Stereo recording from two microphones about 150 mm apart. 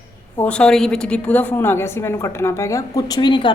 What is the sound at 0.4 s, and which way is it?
A woman's voice, 5° left (ahead or behind).